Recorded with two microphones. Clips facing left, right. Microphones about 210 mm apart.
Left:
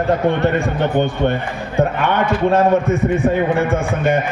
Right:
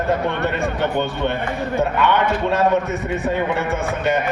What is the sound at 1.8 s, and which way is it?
Speech, 50° left (ahead or behind).